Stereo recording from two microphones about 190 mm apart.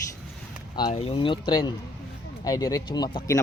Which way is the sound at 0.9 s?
30° left (ahead or behind).